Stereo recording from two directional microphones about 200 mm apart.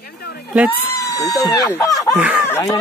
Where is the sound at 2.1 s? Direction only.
5° right (ahead or behind).